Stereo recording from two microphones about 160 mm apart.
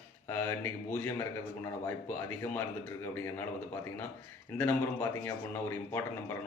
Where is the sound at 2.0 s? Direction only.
10° left (ahead or behind).